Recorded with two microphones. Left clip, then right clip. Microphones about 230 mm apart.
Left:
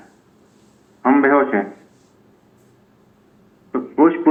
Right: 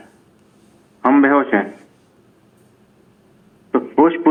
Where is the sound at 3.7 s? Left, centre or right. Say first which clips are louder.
Right 1 dB; right.